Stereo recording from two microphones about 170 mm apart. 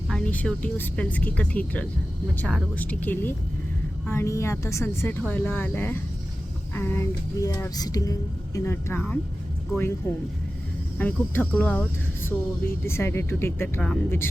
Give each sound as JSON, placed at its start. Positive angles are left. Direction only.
{"t": 0.1, "sound": "speech", "side_deg": 5}
{"t": 6.7, "sound": "music", "side_deg": 15}
{"t": 8.5, "sound": "speech", "side_deg": 15}